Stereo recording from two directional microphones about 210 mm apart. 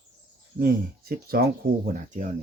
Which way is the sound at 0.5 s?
45° right (ahead or behind).